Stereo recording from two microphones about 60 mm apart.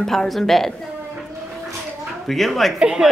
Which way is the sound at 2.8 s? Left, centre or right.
Centre.